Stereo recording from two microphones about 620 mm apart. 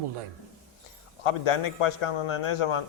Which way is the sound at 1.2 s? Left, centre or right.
Left.